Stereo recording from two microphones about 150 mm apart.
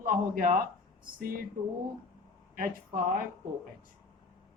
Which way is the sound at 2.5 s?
70° right (ahead or behind).